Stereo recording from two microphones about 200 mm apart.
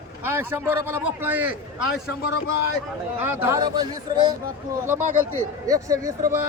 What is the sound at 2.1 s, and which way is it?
Speech, 65° left (ahead or behind).